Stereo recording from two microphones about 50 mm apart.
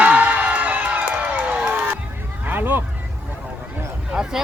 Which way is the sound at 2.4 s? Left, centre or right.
Right.